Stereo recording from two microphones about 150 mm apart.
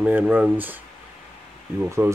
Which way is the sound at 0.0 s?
10° right (ahead or behind).